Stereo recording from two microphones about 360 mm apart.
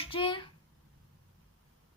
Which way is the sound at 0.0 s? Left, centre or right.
Centre.